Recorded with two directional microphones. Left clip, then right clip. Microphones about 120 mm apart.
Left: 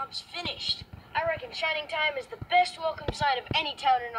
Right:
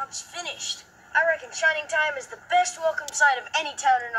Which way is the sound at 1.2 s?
60° right (ahead or behind).